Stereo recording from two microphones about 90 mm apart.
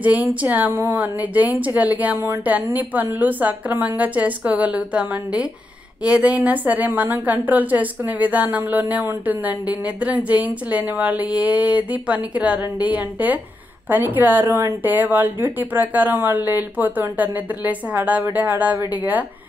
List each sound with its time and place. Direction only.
0.0 s a woman's voice: 15° right (ahead or behind)